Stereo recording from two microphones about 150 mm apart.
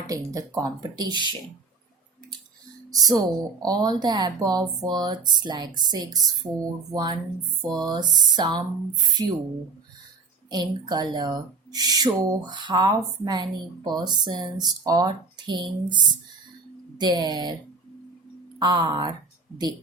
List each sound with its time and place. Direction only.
0.1 s speech: 20° right (ahead or behind)
2.9 s speech: 25° right (ahead or behind)
10.5 s speech: 30° right (ahead or behind)
18.6 s speech: 30° right (ahead or behind)